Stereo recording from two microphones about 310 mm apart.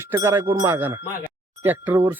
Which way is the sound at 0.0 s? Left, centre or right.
Centre.